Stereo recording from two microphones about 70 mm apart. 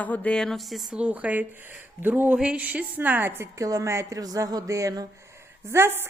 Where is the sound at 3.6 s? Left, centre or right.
Right.